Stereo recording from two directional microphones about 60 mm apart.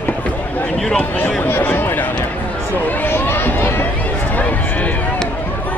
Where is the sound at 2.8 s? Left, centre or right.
Left.